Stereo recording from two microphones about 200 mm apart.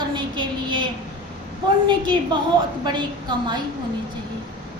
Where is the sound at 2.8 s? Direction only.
20° right (ahead or behind).